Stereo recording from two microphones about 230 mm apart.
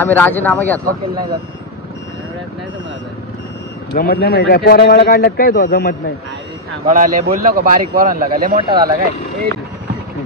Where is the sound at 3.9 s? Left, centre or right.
Left.